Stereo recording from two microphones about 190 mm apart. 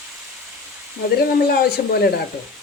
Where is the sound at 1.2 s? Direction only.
55° left (ahead or behind).